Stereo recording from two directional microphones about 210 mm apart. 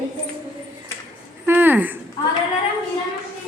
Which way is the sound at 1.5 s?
10° right (ahead or behind).